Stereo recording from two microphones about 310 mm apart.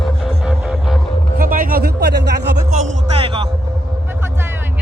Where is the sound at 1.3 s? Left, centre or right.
Right.